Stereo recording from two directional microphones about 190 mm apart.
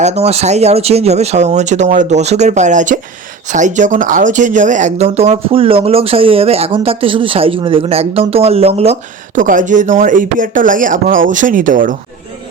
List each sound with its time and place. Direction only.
0.0 s speech: 35° right (ahead or behind)